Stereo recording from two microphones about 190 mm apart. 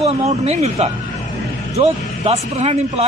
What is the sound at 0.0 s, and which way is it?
Speech, 35° right (ahead or behind).